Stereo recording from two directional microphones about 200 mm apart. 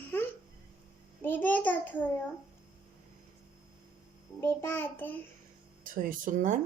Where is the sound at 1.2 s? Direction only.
10° left (ahead or behind).